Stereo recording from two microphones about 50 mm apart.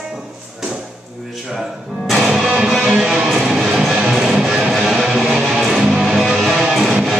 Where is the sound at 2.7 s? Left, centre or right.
Centre.